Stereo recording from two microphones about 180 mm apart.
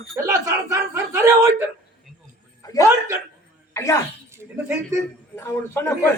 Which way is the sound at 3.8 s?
15° left (ahead or behind).